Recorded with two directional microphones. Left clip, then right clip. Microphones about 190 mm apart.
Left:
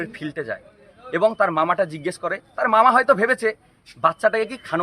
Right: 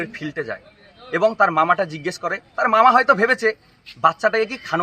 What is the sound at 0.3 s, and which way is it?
A man's voice, 5° left (ahead or behind).